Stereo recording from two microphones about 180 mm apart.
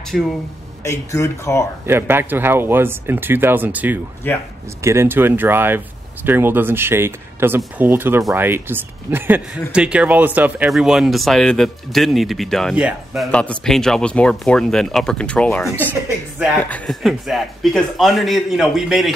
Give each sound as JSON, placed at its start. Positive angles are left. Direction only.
{"t": 0.1, "sound": "speech", "side_deg": 0}
{"t": 0.8, "sound": "speech", "side_deg": 15}
{"t": 1.9, "sound": "speech", "side_deg": -10}
{"t": 4.2, "sound": "speech", "side_deg": 10}
{"t": 4.8, "sound": "speech", "side_deg": -15}